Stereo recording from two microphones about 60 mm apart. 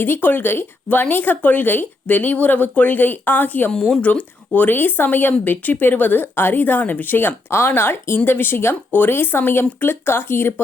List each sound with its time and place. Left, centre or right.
0.0 s speech: left
3.7 s speech: centre
4.0 s speech: left